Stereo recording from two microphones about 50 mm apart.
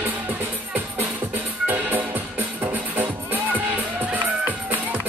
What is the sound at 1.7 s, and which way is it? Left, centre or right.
Music, right.